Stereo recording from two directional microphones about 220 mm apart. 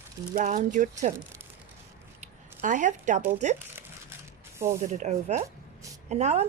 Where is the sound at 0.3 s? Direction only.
35° right (ahead or behind).